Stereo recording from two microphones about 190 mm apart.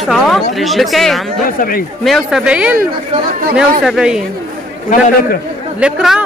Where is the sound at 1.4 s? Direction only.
50° left (ahead or behind).